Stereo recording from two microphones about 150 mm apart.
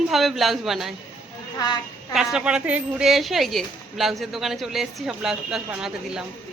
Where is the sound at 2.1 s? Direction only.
5° right (ahead or behind).